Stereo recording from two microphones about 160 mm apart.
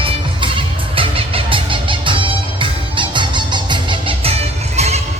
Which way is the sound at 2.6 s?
30° right (ahead or behind).